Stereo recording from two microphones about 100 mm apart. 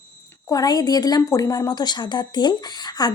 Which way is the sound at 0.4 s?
40° left (ahead or behind).